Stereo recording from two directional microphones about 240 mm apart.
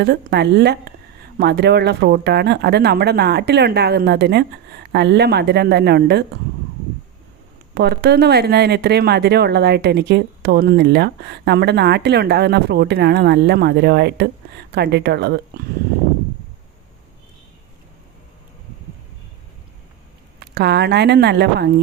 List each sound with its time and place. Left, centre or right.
0.0 s speech: right
7.8 s speech: right
20.5 s speech: right